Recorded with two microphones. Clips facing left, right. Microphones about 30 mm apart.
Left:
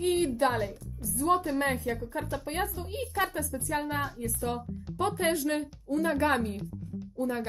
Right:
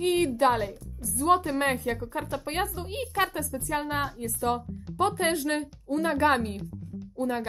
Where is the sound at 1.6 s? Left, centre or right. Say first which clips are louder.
Right 2 dB; right.